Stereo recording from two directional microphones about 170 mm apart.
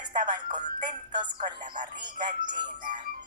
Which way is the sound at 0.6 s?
50° right (ahead or behind).